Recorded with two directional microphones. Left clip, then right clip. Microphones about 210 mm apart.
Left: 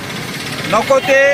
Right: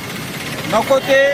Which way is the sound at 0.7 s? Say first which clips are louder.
Left 2 dB; centre (ahead or behind).